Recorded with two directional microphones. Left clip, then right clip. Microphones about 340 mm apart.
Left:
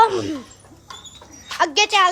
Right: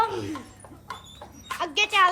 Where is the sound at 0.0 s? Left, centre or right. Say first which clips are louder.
Left 10 dB; centre.